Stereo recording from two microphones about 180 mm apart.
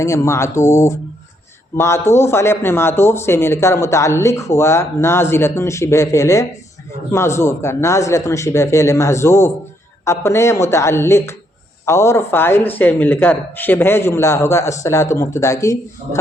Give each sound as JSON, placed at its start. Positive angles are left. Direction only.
{"t": 0.0, "sound": "a man's voice", "side_deg": 15}